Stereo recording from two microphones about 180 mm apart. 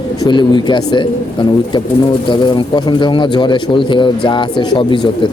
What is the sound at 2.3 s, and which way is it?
Speech, 25° left (ahead or behind).